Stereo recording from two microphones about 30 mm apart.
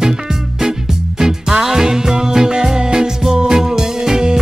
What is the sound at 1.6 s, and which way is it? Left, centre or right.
Music, centre.